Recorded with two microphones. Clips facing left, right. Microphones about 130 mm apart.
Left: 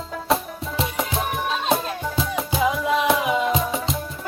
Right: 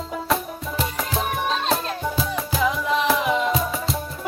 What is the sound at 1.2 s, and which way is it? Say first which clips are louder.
Music: right 4 dB; 10° left (ahead or behind).